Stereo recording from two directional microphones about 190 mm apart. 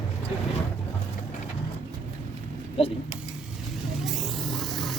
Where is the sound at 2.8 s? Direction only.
30° left (ahead or behind).